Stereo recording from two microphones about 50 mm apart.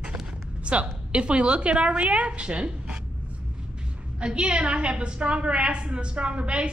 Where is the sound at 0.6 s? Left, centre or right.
Right.